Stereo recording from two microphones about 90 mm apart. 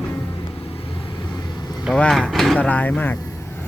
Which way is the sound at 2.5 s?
15° left (ahead or behind).